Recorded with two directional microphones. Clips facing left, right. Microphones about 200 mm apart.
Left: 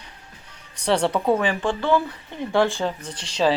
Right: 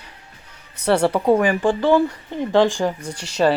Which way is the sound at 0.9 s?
10° right (ahead or behind).